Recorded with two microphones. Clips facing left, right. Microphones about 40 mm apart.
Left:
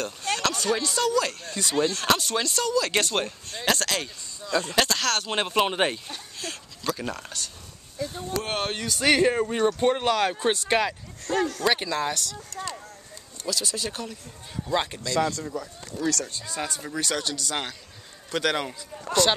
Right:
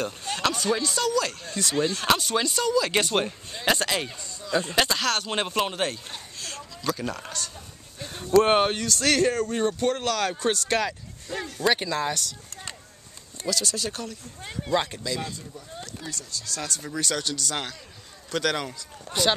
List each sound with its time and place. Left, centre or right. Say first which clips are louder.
0.0 s speech: even; centre
5.7 s speech: left 4 dB; centre
6.4 s speech: right 1 dB; centre
8.0 s speech: right 9 dB; right
8.7 s speech: left 1 dB; centre
11.2 s speech: left 8 dB; left
11.6 s speech: even; centre
13.5 s speech: right 1 dB; centre
15.1 s speech: left 9 dB; left
16.4 s speech: left 1 dB; centre